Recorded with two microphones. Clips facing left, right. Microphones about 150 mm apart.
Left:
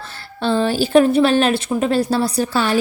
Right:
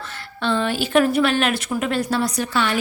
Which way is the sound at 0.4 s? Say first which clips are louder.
Left 4 dB; 35° left (ahead or behind).